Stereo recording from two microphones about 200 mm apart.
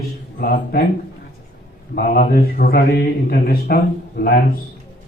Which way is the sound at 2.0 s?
50° left (ahead or behind).